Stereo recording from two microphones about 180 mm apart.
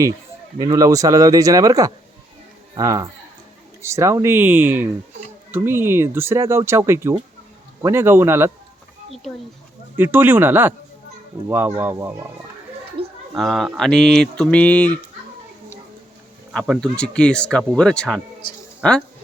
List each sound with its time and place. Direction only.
0.6 s speech: 20° right (ahead or behind)
10.0 s speech: 10° right (ahead or behind)
13.0 s a sound: 30° right (ahead or behind)
13.3 s speech: centre (ahead or behind)
16.5 s speech: centre (ahead or behind)